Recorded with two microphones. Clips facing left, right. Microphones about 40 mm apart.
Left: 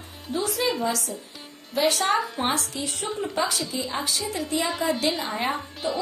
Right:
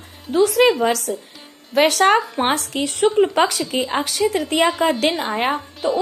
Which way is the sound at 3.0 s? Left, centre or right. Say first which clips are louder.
Right 12 dB; right.